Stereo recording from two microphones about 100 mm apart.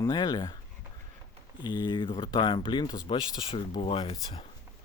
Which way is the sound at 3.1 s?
55° left (ahead or behind).